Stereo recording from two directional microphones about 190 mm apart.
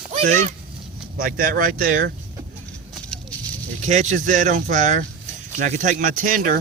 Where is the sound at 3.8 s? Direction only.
40° right (ahead or behind).